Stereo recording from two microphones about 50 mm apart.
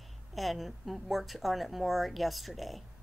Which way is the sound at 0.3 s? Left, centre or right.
Centre.